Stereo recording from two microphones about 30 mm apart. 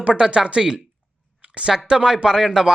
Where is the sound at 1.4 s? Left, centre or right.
Right.